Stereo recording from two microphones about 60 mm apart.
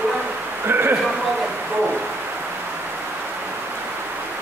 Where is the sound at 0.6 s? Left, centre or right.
Right.